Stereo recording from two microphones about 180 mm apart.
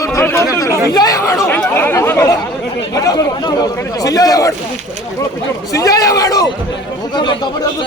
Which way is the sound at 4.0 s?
20° left (ahead or behind).